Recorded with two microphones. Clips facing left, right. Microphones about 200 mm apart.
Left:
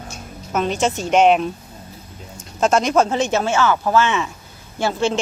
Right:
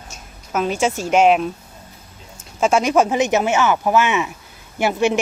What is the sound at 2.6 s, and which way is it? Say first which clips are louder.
Speech: even; 10° right (ahead or behind).